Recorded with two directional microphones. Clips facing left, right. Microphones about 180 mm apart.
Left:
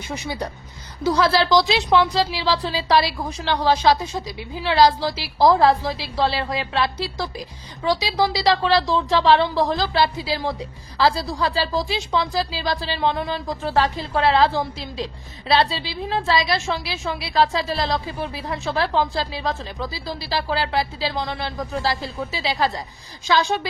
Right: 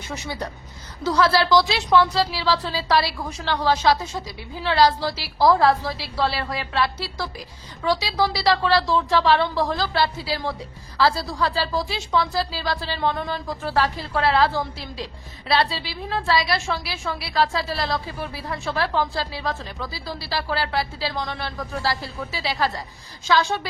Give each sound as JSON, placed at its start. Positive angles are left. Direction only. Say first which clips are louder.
{"t": 0.1, "sound": "a woman's voice", "louder": "left 2 dB", "side_deg": 15}